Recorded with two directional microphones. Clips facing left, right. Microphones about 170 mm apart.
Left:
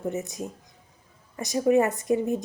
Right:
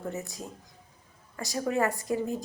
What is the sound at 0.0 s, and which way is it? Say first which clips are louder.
A woman's voice: left 6 dB; 20° left (ahead or behind).